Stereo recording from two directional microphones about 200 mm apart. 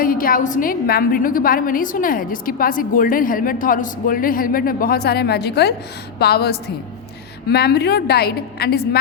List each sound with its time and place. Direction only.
0.0 s a woman's voice: 45° left (ahead or behind)